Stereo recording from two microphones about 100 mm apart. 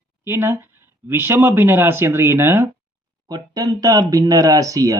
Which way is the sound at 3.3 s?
40° right (ahead or behind).